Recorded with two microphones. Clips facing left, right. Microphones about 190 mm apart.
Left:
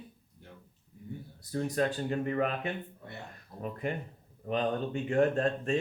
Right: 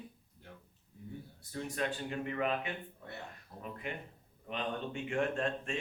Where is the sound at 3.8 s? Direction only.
45° left (ahead or behind).